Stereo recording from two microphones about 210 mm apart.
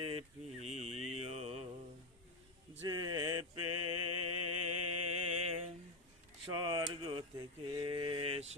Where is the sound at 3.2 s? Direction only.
90° right.